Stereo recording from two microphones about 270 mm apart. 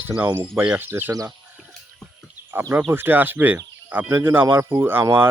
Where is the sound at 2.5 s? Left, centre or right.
Centre.